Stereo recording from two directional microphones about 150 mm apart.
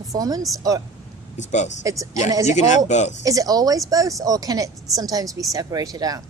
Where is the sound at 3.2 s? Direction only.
25° right (ahead or behind).